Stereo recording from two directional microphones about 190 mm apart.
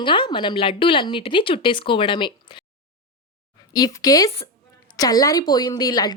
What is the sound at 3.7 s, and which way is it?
Speech, 20° left (ahead or behind).